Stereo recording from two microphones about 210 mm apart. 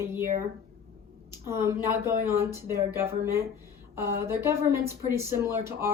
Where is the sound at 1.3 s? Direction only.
15° right (ahead or behind).